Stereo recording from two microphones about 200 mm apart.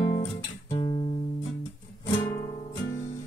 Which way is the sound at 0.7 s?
20° left (ahead or behind).